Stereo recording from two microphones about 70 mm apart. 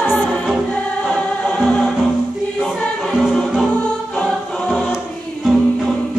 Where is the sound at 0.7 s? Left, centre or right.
Centre.